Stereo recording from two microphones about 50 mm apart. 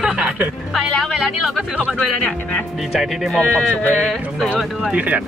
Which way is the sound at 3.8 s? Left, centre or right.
Left.